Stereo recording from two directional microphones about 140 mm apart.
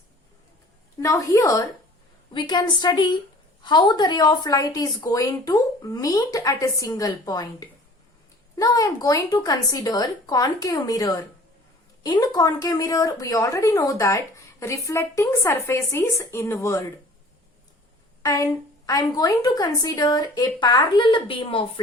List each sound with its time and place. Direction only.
0.9 s a woman's voice: 25° left (ahead or behind)
18.2 s a sound: 25° left (ahead or behind)
18.9 s a woman's voice: 25° left (ahead or behind)